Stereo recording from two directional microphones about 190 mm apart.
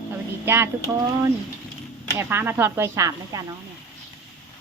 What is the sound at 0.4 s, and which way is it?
Speech, 15° right (ahead or behind).